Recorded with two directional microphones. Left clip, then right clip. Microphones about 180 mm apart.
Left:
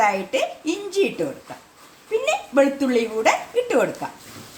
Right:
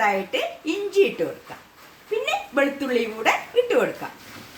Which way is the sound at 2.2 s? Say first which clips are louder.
Left 4 dB; 50° left (ahead or behind).